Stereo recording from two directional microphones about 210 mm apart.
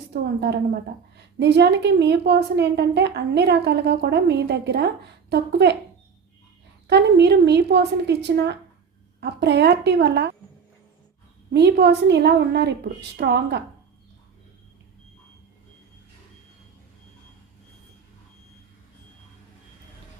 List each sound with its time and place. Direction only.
0.1 s a woman's voice: 50° right (ahead or behind)
6.8 s a woman's voice: 55° right (ahead or behind)
11.5 s a woman's voice: 50° right (ahead or behind)